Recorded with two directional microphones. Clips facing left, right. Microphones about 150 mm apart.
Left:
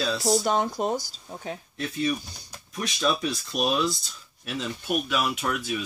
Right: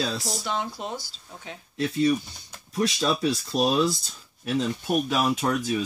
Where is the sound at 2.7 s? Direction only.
35° right (ahead or behind).